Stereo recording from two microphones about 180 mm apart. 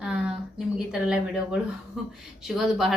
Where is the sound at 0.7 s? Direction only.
5° right (ahead or behind).